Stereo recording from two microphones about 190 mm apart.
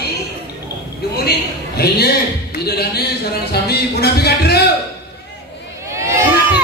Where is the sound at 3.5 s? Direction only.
55° left (ahead or behind).